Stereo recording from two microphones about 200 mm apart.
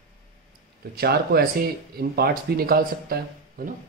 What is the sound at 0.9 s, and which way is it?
Speech, 50° right (ahead or behind).